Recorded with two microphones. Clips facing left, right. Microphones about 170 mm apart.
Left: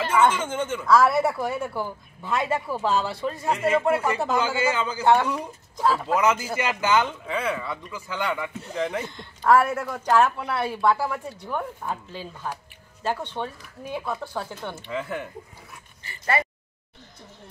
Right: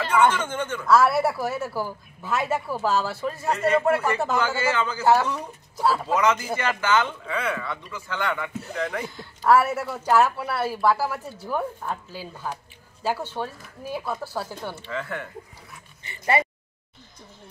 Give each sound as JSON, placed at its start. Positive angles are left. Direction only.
{"t": 0.3, "sound": "a man's voice", "side_deg": 10}
{"t": 0.8, "sound": "a woman's voice", "side_deg": -5}
{"t": 3.5, "sound": "a man's voice", "side_deg": 10}
{"t": 4.4, "sound": "a man's voice", "side_deg": 15}
{"t": 5.8, "sound": "speech", "side_deg": -10}
{"t": 6.1, "sound": "a man's voice", "side_deg": 10}
{"t": 8.7, "sound": "speech", "side_deg": 20}
{"t": 9.0, "sound": "a woman's voice", "side_deg": -5}
{"t": 14.9, "sound": "a man's voice", "side_deg": 15}
{"t": 16.0, "sound": "speech", "side_deg": -25}